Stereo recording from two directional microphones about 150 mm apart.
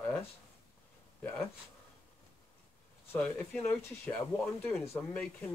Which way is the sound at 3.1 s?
10° left (ahead or behind).